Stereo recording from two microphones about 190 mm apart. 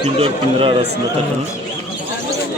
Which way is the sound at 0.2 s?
25° right (ahead or behind).